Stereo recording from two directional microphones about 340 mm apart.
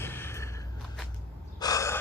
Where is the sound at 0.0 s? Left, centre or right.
Centre.